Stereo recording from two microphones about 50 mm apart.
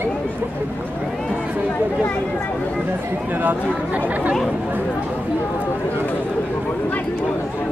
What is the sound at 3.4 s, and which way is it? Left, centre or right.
Speech, right.